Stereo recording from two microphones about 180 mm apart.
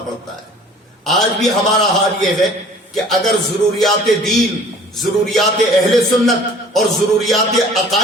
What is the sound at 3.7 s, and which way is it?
A man's voice, centre (ahead or behind).